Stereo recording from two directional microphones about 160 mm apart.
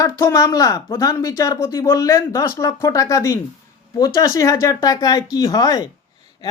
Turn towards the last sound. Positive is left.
turn(degrees=20)  # may be behind; listen again after turning